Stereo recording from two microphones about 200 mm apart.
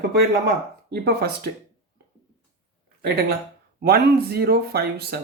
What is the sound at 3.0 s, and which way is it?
Speech, 50° right (ahead or behind).